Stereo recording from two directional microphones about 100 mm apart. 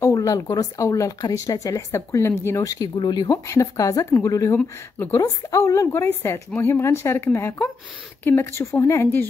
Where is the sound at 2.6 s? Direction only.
35° left (ahead or behind).